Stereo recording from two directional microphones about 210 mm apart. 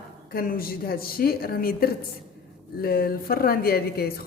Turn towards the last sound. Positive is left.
turn(degrees=50)  # may be behind; listen again after turning